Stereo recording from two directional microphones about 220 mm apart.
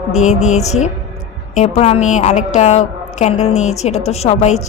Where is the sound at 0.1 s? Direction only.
30° left (ahead or behind).